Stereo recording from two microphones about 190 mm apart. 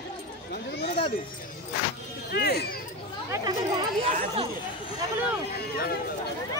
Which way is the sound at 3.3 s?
20° right (ahead or behind).